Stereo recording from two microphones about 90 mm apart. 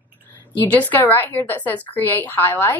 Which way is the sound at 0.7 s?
20° left (ahead or behind).